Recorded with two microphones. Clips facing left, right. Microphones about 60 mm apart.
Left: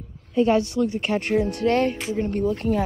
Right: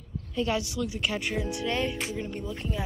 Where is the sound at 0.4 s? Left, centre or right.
Left.